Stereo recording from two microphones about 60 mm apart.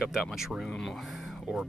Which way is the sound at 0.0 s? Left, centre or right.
Centre.